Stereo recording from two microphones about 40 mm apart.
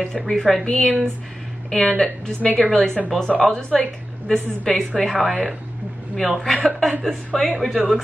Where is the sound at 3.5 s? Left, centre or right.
Left.